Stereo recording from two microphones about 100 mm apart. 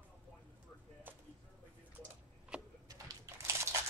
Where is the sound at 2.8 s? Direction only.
35° right (ahead or behind).